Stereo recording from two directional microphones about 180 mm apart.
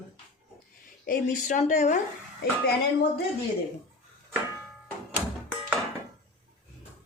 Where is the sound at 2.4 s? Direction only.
60° left (ahead or behind).